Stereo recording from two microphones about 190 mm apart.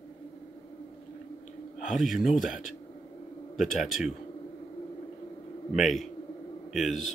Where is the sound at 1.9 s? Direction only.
Centre (ahead or behind).